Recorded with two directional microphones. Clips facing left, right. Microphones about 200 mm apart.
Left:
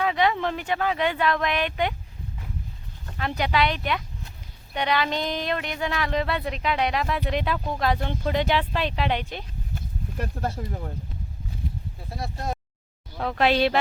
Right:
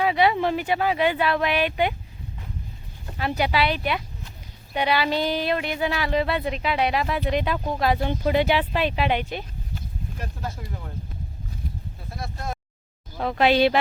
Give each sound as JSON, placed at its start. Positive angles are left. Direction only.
{"t": 0.0, "sound": "speech", "side_deg": -10}
{"t": 3.2, "sound": "speech", "side_deg": -5}
{"t": 10.4, "sound": "speech", "side_deg": 50}
{"t": 12.1, "sound": "speech", "side_deg": 35}
{"t": 13.1, "sound": "speech", "side_deg": -5}